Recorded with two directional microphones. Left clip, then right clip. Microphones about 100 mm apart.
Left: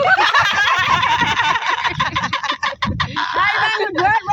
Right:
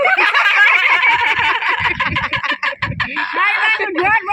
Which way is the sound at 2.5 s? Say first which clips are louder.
Right 2 dB; 10° right (ahead or behind).